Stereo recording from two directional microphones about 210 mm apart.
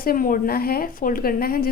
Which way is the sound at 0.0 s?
40° left (ahead or behind).